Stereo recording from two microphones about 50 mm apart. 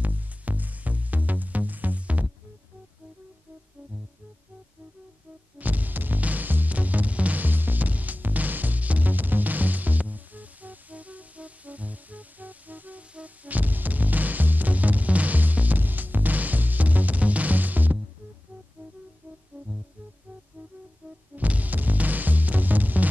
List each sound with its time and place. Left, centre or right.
0.0 s music: right
5.6 s music: right
21.4 s music: right